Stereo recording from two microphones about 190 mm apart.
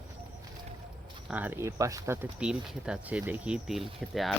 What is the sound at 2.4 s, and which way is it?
Speech, 5° right (ahead or behind).